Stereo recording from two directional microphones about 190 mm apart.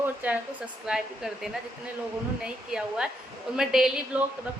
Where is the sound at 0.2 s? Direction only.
10° right (ahead or behind).